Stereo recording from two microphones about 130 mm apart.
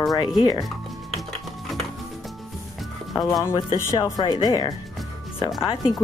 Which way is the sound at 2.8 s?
Centre (ahead or behind).